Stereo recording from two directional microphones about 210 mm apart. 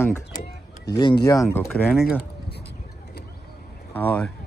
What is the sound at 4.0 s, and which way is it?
Speech, 5° left (ahead or behind).